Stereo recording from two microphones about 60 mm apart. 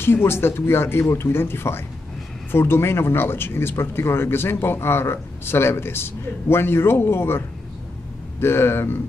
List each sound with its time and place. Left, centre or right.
0.0 s speech: left